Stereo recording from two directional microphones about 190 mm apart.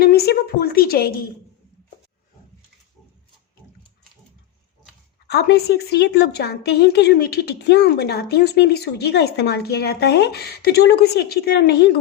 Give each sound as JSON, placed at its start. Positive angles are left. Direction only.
{"t": 0.0, "sound": "a woman's voice", "side_deg": 55}
{"t": 5.3, "sound": "a woman's voice", "side_deg": 55}